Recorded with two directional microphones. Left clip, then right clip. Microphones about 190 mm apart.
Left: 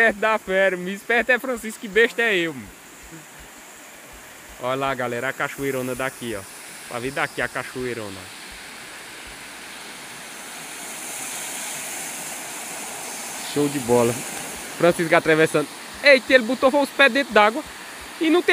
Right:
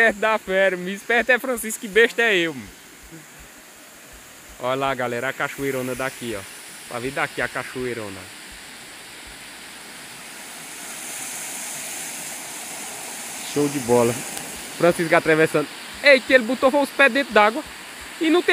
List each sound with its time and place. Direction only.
0.0 s speech: 10° right (ahead or behind)
4.6 s speech: 10° right (ahead or behind)
10.8 s waterfall: centre (ahead or behind)
18.2 s speech: centre (ahead or behind)